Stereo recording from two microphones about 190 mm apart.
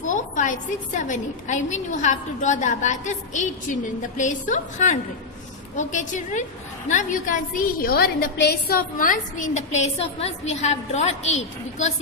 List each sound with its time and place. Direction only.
0.1 s a woman's voice: 40° left (ahead or behind)